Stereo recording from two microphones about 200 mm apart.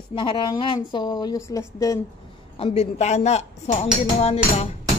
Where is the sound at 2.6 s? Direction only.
30° left (ahead or behind).